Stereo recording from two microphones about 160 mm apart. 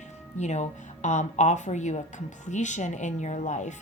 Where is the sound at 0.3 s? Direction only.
45° left (ahead or behind).